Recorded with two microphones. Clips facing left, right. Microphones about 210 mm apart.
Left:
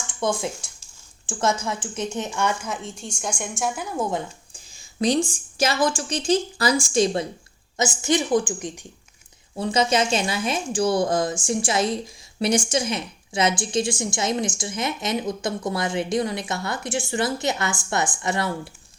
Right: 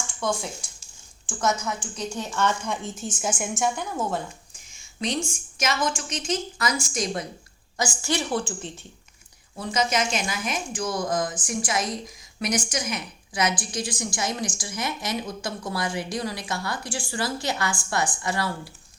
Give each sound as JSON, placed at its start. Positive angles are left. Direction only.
{"t": 0.2, "sound": "speech", "side_deg": 20}
{"t": 2.8, "sound": "a woman's voice", "side_deg": -5}
{"t": 3.9, "sound": "a woman's voice", "side_deg": 10}
{"t": 4.7, "sound": "a sound", "side_deg": 35}
{"t": 5.3, "sound": "a woman's voice", "side_deg": 35}
{"t": 9.6, "sound": "speech", "side_deg": 30}